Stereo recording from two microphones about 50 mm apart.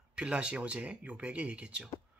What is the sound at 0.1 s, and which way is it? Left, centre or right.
Speech, right.